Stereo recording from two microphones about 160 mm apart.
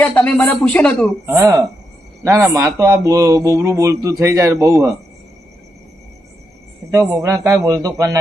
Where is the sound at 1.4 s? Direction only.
20° right (ahead or behind).